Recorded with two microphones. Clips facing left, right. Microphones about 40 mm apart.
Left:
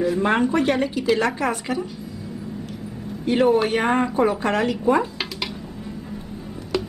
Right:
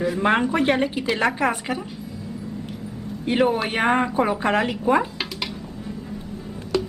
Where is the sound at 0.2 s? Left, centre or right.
Centre.